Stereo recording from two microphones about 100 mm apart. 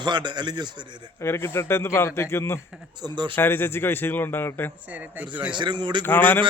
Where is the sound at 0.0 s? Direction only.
50° right (ahead or behind).